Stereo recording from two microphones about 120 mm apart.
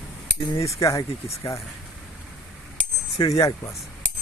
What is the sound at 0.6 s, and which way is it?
Speech, 25° left (ahead or behind).